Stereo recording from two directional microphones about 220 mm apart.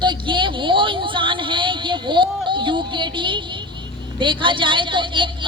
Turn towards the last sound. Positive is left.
turn(degrees=-20)  # may be behind; listen again after turning